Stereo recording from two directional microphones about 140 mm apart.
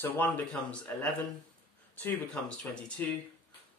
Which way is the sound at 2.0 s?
10° left (ahead or behind).